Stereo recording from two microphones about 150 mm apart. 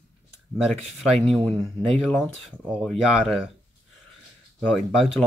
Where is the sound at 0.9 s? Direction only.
Centre (ahead or behind).